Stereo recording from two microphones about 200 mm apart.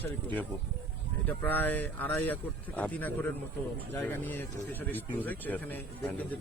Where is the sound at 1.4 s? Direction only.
10° left (ahead or behind).